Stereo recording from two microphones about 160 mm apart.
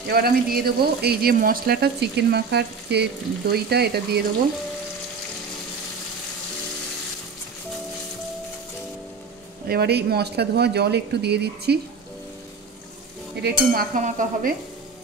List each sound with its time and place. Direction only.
0.1 s speech: 70° right (ahead or behind); by 4.2 s 90° right
9.7 s speech: 85° right
13.7 s a sound: 55° right (ahead or behind)